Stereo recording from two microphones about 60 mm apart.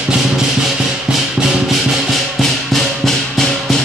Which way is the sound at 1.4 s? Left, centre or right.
Centre.